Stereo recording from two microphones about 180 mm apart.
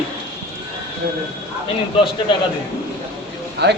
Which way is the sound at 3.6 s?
65° right (ahead or behind).